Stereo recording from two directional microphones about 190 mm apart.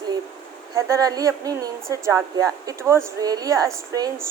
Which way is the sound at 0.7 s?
15° right (ahead or behind).